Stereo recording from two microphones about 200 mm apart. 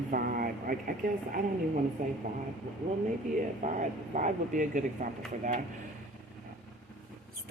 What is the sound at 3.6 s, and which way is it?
Speech, 40° right (ahead or behind).